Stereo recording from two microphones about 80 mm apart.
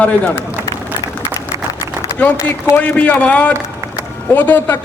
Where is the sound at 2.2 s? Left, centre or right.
Centre.